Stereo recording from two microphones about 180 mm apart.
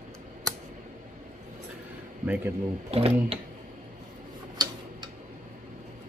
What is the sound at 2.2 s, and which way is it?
Speech, 10° right (ahead or behind).